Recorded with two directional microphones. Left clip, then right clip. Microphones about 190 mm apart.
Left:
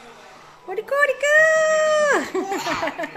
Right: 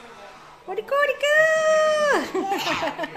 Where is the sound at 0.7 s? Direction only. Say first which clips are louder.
Left 2 dB; 5° left (ahead or behind).